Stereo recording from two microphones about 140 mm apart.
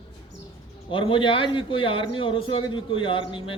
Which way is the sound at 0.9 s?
35° left (ahead or behind).